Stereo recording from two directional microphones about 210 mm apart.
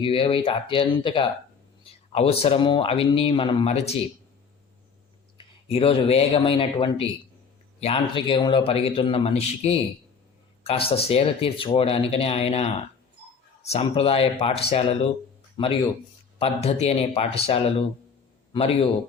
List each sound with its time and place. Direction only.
0.0 s speech: 25° left (ahead or behind)
5.4 s a man's voice: 25° left (ahead or behind)